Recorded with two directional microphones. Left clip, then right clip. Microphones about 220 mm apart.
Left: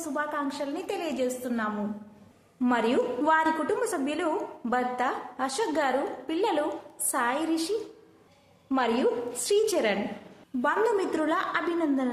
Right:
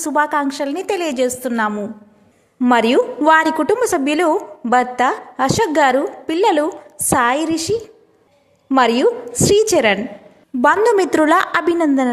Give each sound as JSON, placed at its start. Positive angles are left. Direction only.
{"t": 0.0, "sound": "a woman's voice", "side_deg": -40}